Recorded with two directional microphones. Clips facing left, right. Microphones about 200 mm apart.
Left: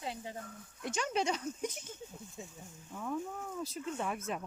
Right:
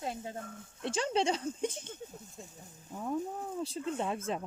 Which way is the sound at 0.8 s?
30° right (ahead or behind).